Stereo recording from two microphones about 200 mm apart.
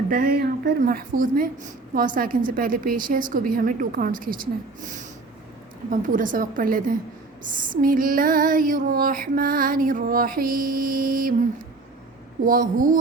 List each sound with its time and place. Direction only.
0.1 s female singing: 45° right (ahead or behind)
12.5 s female singing: 45° right (ahead or behind)